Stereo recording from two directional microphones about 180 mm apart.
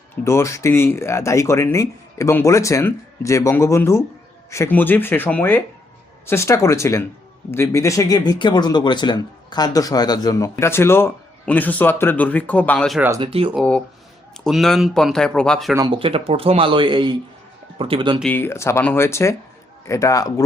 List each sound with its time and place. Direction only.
0.3 s speech: 15° left (ahead or behind)
13.1 s speech: 30° right (ahead or behind)
13.5 s speech: 5° left (ahead or behind)
15.7 s speech: 25° right (ahead or behind)
18.2 s a man's voice: 10° left (ahead or behind)